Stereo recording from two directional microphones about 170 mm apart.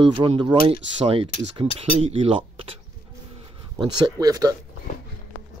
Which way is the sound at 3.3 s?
25° right (ahead or behind).